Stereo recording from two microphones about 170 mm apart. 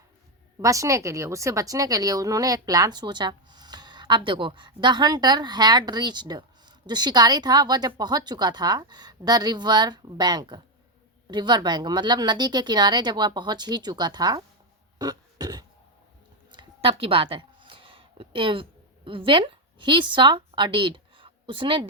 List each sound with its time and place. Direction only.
0.6 s a woman's voice: 20° right (ahead or behind)
14.9 s beatboxing: 20° right (ahead or behind)
16.6 s a sound: 30° right (ahead or behind)